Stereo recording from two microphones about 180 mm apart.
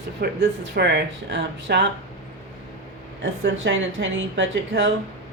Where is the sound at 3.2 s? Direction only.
90° right.